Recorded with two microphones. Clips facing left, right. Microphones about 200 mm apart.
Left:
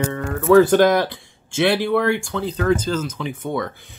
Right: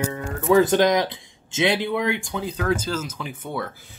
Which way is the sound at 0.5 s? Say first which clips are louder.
Left 5 dB; 60° left (ahead or behind).